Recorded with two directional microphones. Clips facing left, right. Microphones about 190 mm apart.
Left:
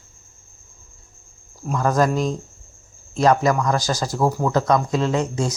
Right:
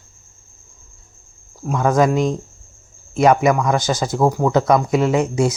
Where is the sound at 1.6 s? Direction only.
Centre (ahead or behind).